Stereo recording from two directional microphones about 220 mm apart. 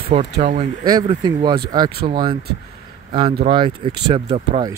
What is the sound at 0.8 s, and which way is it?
Speech, 20° right (ahead or behind).